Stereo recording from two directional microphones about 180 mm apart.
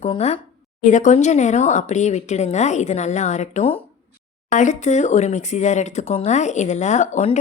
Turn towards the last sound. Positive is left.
turn(degrees=40)  # may be behind; listen again after turning